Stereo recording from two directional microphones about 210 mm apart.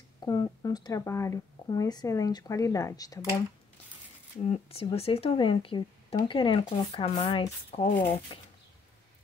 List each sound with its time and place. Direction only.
0.2 s speech: 20° left (ahead or behind)
4.5 s speech: 30° left (ahead or behind)